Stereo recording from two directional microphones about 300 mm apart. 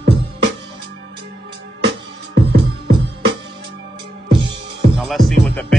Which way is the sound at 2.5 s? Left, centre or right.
Right.